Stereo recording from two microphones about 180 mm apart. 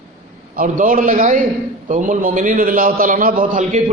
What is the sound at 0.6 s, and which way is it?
A man's voice, 45° right (ahead or behind).